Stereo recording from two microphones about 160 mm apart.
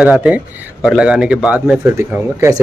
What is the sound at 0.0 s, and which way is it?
Speech, 10° right (ahead or behind).